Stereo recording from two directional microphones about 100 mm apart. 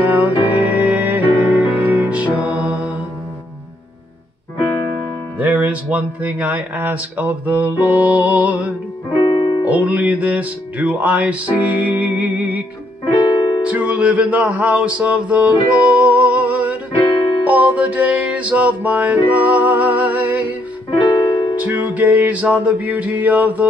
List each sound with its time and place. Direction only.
0.5 s music: 15° right (ahead or behind)
5.4 s speech: 15° right (ahead or behind)
7.4 s music: 15° right (ahead or behind)
9.1 s music: 60° left (ahead or behind)
9.7 s music: 15° right (ahead or behind)
13.0 s piano: 50° left (ahead or behind)
13.7 s music: 15° right (ahead or behind)
20.9 s music: 50° left (ahead or behind)
21.6 s music: 15° right (ahead or behind)